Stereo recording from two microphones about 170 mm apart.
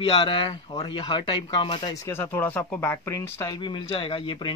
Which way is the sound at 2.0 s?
15° left (ahead or behind).